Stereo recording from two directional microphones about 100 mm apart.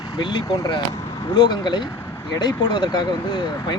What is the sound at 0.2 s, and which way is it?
Speech, 55° left (ahead or behind).